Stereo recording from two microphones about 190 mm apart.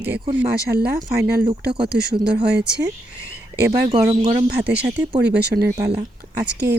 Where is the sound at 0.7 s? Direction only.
55° right (ahead or behind).